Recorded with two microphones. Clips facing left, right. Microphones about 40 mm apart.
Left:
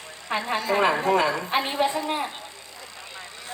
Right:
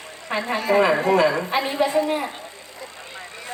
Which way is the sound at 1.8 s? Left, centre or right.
Right.